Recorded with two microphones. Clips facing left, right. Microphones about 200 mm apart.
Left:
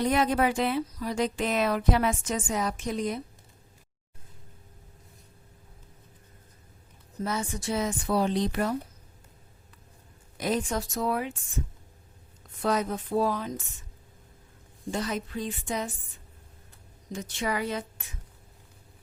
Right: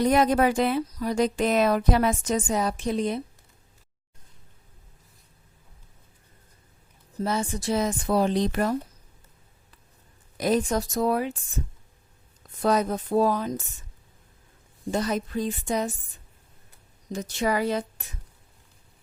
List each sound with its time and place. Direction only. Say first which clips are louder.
0.0 s speech: right 4 dB; 40° right (ahead or behind)
7.2 s speech: right 4 dB; 30° right (ahead or behind); by 8.7 s 50° right (ahead or behind)
10.3 s speech: right 5 dB; 40° right (ahead or behind)
12.6 s speech: right 4 dB; 40° right (ahead or behind)
14.8 s speech: right 5 dB; 40° right (ahead or behind)
17.1 s speech: right 5 dB; 40° right (ahead or behind)